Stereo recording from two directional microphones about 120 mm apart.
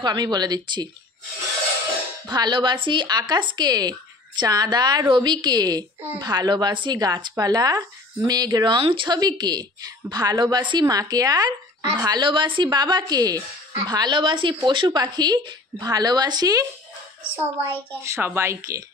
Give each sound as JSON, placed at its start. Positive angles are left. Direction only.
{"t": 0.0, "sound": "a woman's voice", "side_deg": -35}
{"t": 2.2, "sound": "a woman's voice", "side_deg": -35}
{"t": 12.2, "sound": "a woman's voice", "side_deg": -40}
{"t": 17.4, "sound": "a woman's voice", "side_deg": -20}